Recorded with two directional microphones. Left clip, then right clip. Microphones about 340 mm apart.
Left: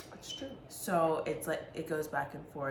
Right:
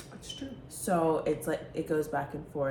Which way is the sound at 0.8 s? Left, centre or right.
Centre.